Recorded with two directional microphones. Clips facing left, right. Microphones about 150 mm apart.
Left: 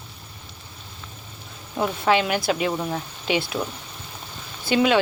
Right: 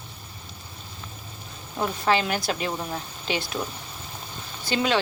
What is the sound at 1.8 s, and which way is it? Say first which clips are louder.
Speech: left 3 dB; 10° left (ahead or behind).